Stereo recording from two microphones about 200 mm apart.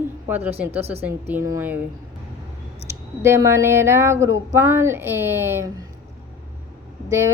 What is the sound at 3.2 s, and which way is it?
Speech, 15° right (ahead or behind).